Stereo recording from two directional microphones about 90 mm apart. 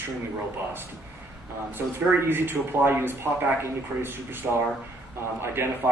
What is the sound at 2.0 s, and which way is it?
A man's voice, 25° right (ahead or behind).